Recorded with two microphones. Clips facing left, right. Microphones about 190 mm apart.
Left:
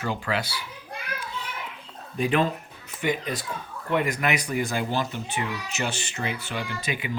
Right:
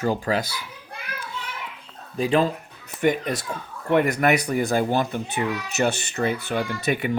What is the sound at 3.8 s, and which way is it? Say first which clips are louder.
Speech: right 6 dB; 50° right (ahead or behind).